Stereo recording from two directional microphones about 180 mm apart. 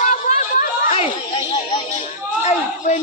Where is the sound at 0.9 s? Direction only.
35° left (ahead or behind).